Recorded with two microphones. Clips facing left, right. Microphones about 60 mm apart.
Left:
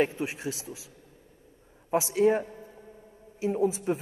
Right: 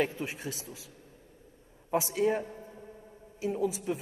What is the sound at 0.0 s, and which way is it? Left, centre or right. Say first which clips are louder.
Speech: left 4 dB; left.